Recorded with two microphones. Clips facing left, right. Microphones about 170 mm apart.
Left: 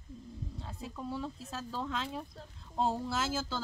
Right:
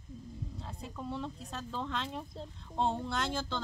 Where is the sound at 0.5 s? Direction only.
Centre (ahead or behind).